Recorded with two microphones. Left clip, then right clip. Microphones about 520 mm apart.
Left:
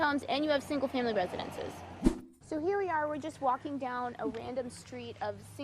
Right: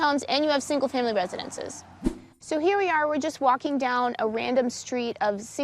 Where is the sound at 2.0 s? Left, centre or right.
Centre.